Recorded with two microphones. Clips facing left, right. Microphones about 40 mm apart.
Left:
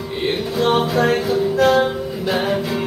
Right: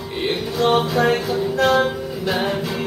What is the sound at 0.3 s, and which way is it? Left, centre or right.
Music, centre.